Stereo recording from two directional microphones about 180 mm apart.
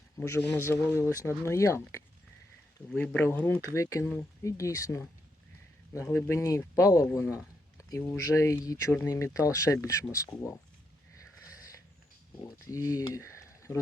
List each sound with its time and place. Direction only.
0.2 s speech: 10° left (ahead or behind)
6.1 s speech: 10° left (ahead or behind)
12.4 s speech: 15° left (ahead or behind)